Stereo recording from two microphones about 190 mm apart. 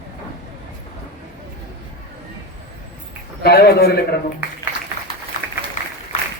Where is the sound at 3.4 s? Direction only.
55° left (ahead or behind).